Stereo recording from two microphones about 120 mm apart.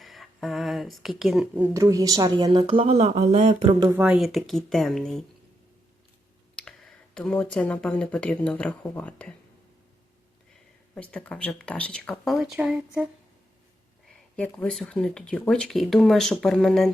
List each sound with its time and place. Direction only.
0.0 s speech: centre (ahead or behind)
1.7 s speech: 25° right (ahead or behind); by 2.9 s 45° right (ahead or behind)
2.9 s speech: 70° right (ahead or behind)
3.9 s speech: 10° right (ahead or behind)
6.6 s speech: 5° left (ahead or behind)
10.9 s speech: 10° left (ahead or behind)
14.1 s speech: 10° left (ahead or behind)